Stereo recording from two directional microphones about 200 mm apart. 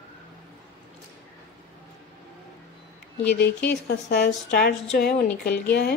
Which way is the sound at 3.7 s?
55° left (ahead or behind).